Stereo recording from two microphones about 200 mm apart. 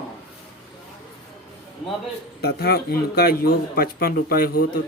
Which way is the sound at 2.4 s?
55° left (ahead or behind).